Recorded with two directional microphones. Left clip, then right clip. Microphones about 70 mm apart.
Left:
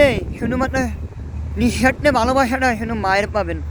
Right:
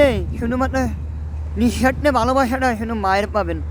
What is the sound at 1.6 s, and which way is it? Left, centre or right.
Speech, right.